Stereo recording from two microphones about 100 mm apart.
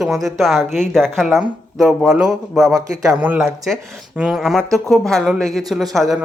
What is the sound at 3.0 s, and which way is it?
Speech, 15° right (ahead or behind).